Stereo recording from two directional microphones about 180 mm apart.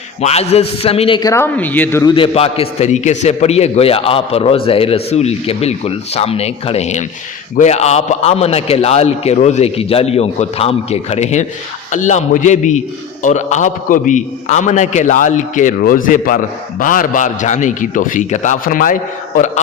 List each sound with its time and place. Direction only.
0.2 s a man's voice: 35° left (ahead or behind)
1.3 s speech: 10° left (ahead or behind)
2.1 s a man's voice: 30° left (ahead or behind); by 18.9 s 50° left (ahead or behind)